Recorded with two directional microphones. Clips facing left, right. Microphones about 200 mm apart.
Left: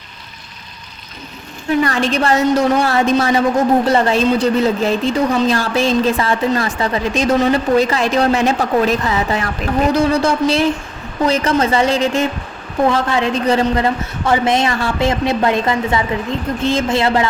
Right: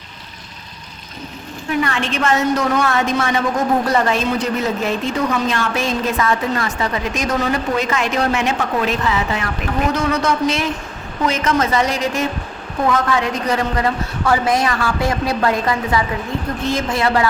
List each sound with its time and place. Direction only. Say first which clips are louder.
1.8 s a man's voice: left 3 dB; 35° left (ahead or behind)